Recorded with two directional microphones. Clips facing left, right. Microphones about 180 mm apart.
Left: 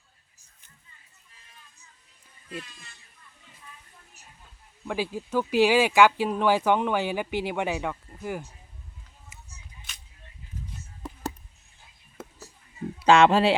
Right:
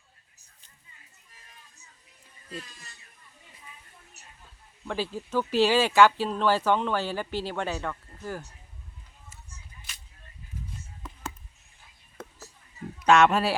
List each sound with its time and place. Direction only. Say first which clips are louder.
2.5 s speech: left 2 dB; 40° right (ahead or behind)
4.9 s speech: left 2 dB; 10° left (ahead or behind)
9.3 s whip: left 1 dB; 15° left (ahead or behind)
13.0 s speech: left 2 dB; 30° left (ahead or behind)